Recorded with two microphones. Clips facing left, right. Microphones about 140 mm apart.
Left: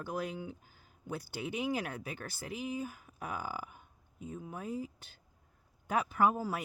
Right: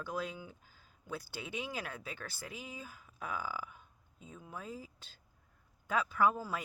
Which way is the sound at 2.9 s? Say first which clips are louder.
Left 1 dB; 55° left (ahead or behind).